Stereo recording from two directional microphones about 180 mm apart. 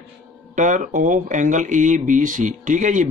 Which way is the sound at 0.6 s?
45° right (ahead or behind).